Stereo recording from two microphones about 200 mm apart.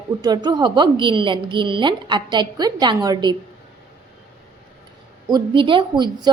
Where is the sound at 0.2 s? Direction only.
20° right (ahead or behind).